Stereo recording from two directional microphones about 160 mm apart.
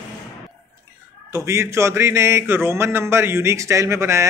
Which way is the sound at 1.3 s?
20° right (ahead or behind).